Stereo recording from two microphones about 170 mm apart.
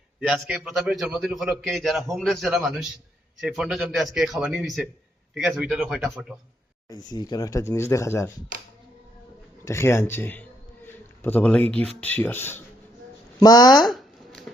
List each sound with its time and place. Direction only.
0.2 s a man's voice: 5° right (ahead or behind)
6.8 s speech: 20° left (ahead or behind)
9.6 s speech: 15° left (ahead or behind)
13.4 s speech: 25° left (ahead or behind)
13.8 s shuffling cards: centre (ahead or behind)